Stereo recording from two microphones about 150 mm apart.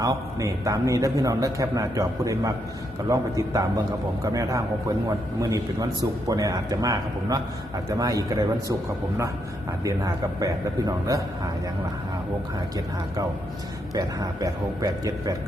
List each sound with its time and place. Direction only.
0.0 s a man's voice: 20° right (ahead or behind)
9.8 s a man's voice: 25° right (ahead or behind)
13.9 s a man's voice: 25° right (ahead or behind)